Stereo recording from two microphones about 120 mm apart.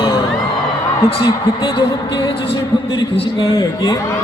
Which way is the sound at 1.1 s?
40° left (ahead or behind).